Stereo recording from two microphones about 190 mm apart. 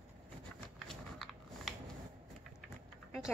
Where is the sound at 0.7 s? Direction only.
Centre (ahead or behind).